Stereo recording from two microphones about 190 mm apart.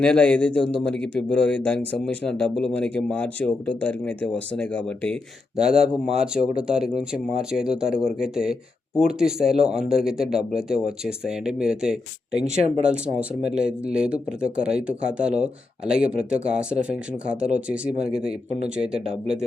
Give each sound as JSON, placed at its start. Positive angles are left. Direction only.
{"t": 0.0, "sound": "a man's voice", "side_deg": 5}
{"t": 12.4, "sound": "speech", "side_deg": -35}
{"t": 12.8, "sound": "a man's voice", "side_deg": -5}